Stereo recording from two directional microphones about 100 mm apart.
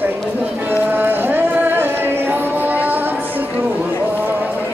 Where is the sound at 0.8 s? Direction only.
20° right (ahead or behind).